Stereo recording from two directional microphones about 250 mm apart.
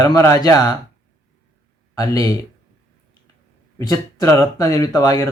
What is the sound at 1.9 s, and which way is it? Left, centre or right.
Speech, centre.